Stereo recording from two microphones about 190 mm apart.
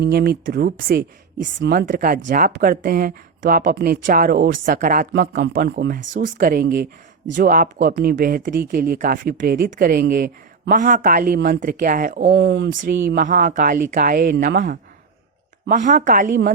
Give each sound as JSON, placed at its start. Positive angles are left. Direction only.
{"t": 0.0, "sound": "speech", "side_deg": -55}
{"t": 12.2, "sound": "speech", "side_deg": -65}
{"t": 12.8, "sound": "speech", "side_deg": -45}